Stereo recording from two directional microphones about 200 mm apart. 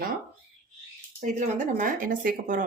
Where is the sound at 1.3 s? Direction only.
40° right (ahead or behind).